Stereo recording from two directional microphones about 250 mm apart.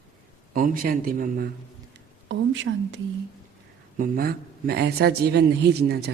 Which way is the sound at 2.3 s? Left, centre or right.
Right.